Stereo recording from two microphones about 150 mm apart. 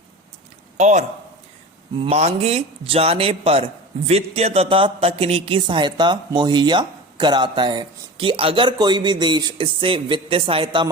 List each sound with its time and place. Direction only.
0.8 s a man's voice: 50° right (ahead or behind)
2.0 s a man's voice: 45° right (ahead or behind)